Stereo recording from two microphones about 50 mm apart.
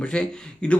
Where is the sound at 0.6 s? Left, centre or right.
Centre.